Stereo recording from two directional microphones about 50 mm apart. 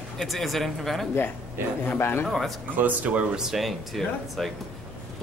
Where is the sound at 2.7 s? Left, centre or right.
Right.